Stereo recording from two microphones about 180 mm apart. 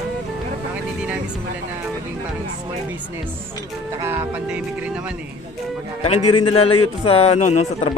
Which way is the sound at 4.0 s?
10° right (ahead or behind).